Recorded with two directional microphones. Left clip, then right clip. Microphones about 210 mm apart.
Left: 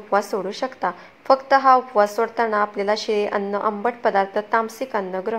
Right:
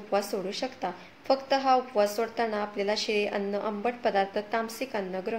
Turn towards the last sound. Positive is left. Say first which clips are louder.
# left 8 dB
turn(degrees=10)  # may be behind; listen again after turning